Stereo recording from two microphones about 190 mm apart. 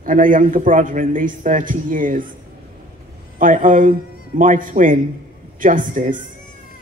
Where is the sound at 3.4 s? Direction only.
45° right (ahead or behind).